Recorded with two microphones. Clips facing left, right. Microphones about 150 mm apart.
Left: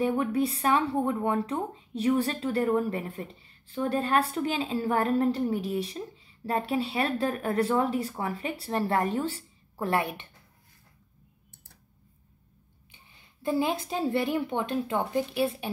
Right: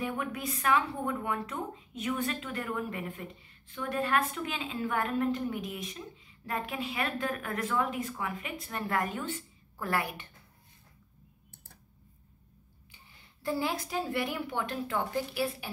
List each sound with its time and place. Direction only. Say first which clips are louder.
0.0 s speech: left 9 dB; 30° left (ahead or behind)
12.9 s a woman's voice: left 1 dB; 20° left (ahead or behind)